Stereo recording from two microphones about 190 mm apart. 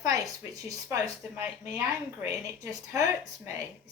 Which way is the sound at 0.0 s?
20° right (ahead or behind).